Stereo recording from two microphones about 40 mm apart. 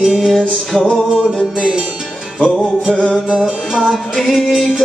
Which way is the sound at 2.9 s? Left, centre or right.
Left.